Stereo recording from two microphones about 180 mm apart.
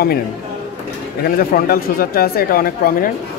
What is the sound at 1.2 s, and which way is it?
Speech, 55° left (ahead or behind).